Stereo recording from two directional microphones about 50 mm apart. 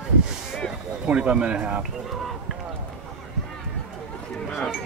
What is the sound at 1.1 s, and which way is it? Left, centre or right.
Speech, right.